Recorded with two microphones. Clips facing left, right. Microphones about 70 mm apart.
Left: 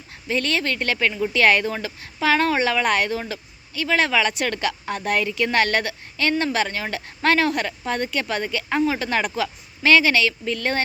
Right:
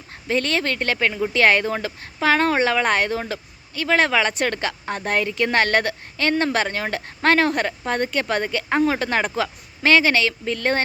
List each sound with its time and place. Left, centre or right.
0.3 s speech: right